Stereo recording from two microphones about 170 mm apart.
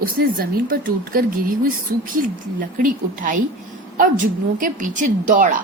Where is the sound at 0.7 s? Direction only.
60° right (ahead or behind).